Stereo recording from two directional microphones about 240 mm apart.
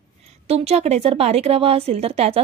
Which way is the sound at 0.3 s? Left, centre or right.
Right.